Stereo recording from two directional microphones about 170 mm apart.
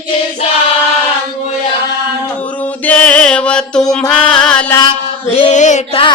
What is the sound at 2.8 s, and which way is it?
Music, 10° left (ahead or behind).